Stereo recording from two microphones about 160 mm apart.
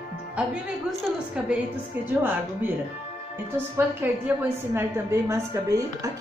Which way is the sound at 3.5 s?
15° right (ahead or behind).